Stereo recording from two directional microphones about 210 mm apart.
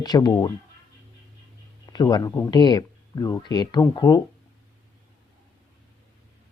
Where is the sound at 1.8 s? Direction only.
20° left (ahead or behind).